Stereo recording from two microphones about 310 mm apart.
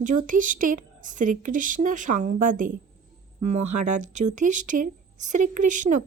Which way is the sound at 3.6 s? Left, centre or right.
Right.